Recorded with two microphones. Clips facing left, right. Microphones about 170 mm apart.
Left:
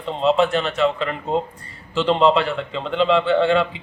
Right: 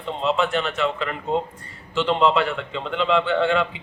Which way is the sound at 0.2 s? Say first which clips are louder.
Left 5 dB; 35° left (ahead or behind).